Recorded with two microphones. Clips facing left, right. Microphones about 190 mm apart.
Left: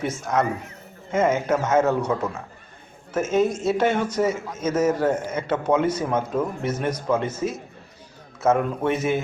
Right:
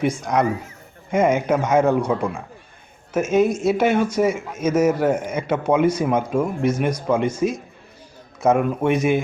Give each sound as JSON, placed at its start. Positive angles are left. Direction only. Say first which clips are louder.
{"t": 0.0, "sound": "a man's voice", "louder": "right 4 dB", "side_deg": -15}